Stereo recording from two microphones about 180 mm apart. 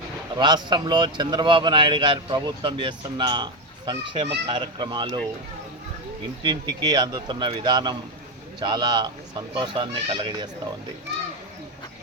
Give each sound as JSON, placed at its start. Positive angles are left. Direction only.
{"t": 0.3, "sound": "speech", "side_deg": -25}
{"t": 6.4, "sound": "speech", "side_deg": -25}